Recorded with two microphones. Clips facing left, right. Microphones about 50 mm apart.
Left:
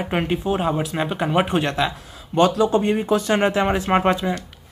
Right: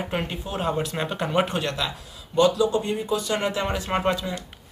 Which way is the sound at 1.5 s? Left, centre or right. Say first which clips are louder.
Left 6 dB; left.